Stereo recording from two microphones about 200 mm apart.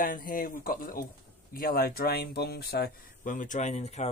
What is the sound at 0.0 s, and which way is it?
Speech, 45° left (ahead or behind).